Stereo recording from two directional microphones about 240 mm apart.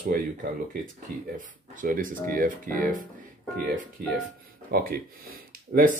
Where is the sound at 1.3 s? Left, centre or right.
Right.